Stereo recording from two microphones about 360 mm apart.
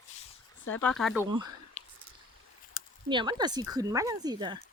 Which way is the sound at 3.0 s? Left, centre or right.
Centre.